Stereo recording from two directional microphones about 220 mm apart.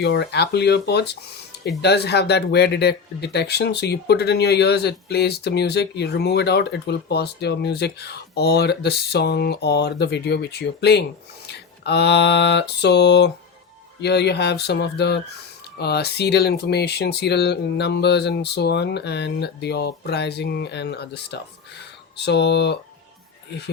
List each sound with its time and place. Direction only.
0.0 s speech: 50° left (ahead or behind)
11.4 s a sound: 50° left (ahead or behind)
14.0 s speech: 50° left (ahead or behind)